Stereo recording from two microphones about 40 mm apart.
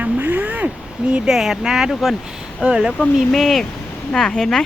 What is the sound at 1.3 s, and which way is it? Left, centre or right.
Speech, centre.